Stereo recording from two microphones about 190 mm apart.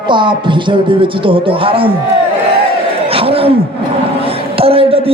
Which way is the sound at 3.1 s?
30° right (ahead or behind).